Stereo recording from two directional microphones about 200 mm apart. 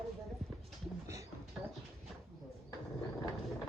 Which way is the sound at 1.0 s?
15° right (ahead or behind).